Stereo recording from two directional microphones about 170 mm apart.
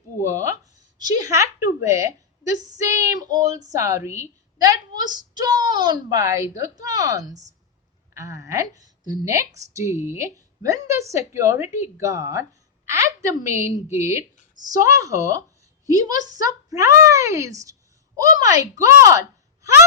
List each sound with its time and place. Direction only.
0.3 s a woman's voice: 20° right (ahead or behind)